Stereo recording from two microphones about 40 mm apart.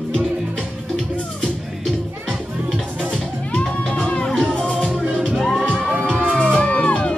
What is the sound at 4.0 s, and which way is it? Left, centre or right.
Music, left.